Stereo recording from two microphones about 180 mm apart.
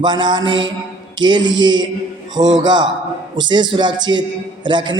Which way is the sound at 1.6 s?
25° right (ahead or behind).